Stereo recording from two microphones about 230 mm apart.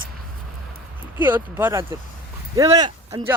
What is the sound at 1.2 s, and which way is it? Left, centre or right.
Speech, centre.